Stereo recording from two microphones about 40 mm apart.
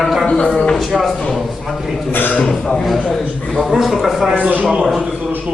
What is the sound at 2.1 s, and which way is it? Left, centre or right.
Speech, left.